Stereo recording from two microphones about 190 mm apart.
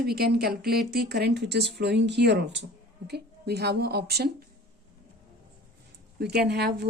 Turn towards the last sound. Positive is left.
turn(degrees=-60)  # may be behind; listen again after turning